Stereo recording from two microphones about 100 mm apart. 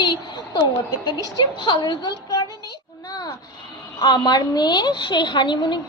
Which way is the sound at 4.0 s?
45° left (ahead or behind).